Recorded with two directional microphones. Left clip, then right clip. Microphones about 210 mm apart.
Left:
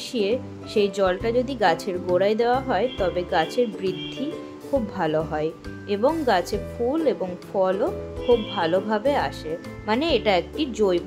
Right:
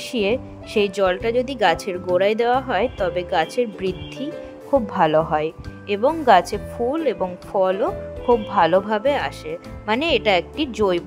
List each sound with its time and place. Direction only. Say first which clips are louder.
0.1 s speech: right 3 dB; 25° right (ahead or behind)